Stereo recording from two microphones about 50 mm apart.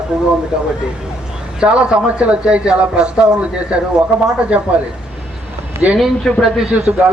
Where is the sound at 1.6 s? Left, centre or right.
Right.